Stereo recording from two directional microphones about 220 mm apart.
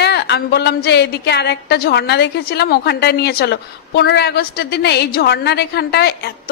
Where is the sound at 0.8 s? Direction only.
50° left (ahead or behind).